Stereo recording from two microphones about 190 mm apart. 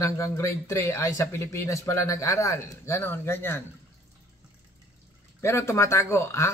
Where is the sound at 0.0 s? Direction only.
15° left (ahead or behind).